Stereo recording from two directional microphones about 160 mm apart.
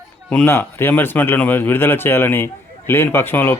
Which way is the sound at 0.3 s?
10° left (ahead or behind).